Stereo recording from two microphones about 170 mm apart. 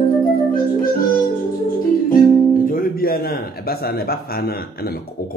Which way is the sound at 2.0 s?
55° left (ahead or behind).